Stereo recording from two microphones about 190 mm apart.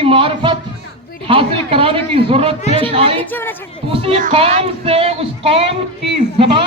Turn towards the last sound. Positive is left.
turn(degrees=-30)  # may be behind; listen again after turning